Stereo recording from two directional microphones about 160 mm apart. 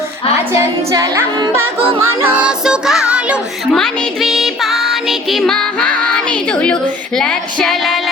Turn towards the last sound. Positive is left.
turn(degrees=0)  # may be behind; listen again after turning